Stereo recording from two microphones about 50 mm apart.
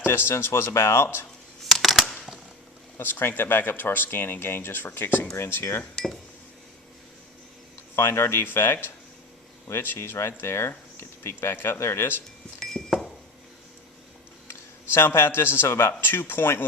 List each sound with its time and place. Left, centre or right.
0.0 s speech: left
1.6 s a sound: centre
3.0 s speech: left
6.0 s speech: centre
7.9 s speech: left
12.5 s a sound: centre
14.9 s speech: left